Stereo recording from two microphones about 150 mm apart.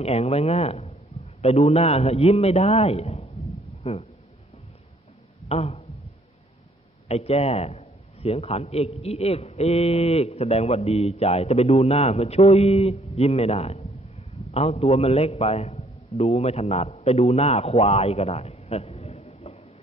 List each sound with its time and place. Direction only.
0.0 s a man's voice: 40° left (ahead or behind)
5.5 s speech: 45° left (ahead or behind)
7.1 s a man's voice: 40° left (ahead or behind)